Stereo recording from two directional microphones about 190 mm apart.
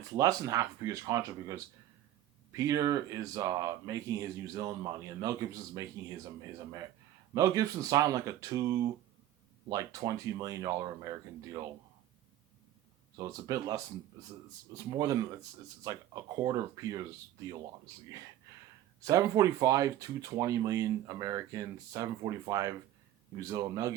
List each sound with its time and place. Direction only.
0.1 s speech: 20° right (ahead or behind)
7.3 s speech: 20° right (ahead or behind)
13.1 s speech: 20° right (ahead or behind)